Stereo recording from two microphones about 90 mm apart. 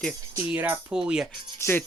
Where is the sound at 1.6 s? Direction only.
25° left (ahead or behind).